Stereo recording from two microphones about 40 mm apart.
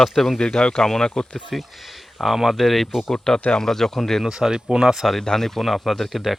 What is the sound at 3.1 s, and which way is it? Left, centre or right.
Speech, centre.